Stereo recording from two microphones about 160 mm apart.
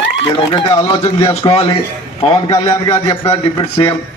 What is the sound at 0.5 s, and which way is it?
A man's voice, 20° left (ahead or behind).